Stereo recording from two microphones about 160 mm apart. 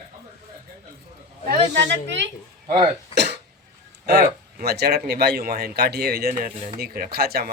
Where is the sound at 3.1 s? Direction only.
90° right.